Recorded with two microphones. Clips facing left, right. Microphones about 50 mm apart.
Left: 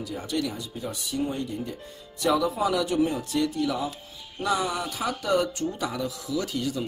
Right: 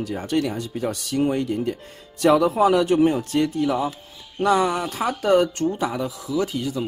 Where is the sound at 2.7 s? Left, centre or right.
Right.